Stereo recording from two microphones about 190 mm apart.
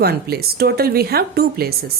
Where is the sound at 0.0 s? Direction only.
55° right (ahead or behind).